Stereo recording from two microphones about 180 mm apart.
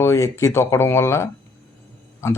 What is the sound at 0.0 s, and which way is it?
Speech, 15° left (ahead or behind).